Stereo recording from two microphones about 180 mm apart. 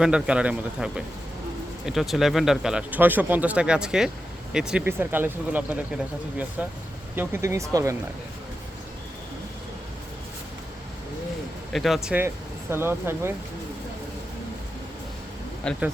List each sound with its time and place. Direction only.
0.0 s speech: 5° right (ahead or behind)
11.7 s speech: centre (ahead or behind)
15.6 s speech: 5° left (ahead or behind)